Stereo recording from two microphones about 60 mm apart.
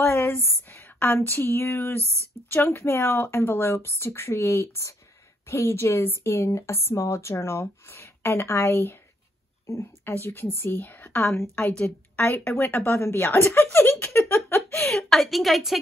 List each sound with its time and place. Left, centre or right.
0.0 s a woman's voice: left
14.9 s a woman's voice: centre